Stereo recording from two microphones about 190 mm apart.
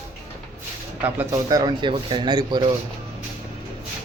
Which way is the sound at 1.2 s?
20° right (ahead or behind).